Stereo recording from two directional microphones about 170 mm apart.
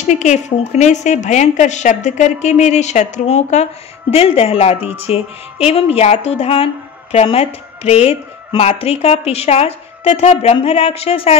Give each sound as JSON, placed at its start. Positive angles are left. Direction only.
{"t": 0.0, "sound": "a woman's voice", "side_deg": 45}